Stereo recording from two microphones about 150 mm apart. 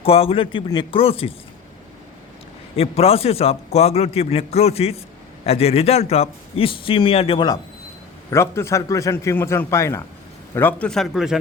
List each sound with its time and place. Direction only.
0.0 s a man's voice: 40° left (ahead or behind)
2.7 s a man's voice: 40° left (ahead or behind)
8.3 s a man's voice: 20° left (ahead or behind); by 11.3 s 5° right (ahead or behind)